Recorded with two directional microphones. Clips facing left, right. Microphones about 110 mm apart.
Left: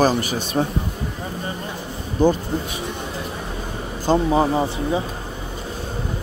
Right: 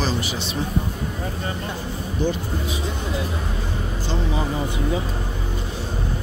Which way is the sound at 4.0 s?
45° left (ahead or behind).